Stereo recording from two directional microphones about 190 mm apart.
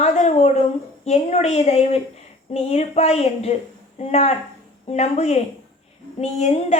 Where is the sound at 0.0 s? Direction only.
35° left (ahead or behind).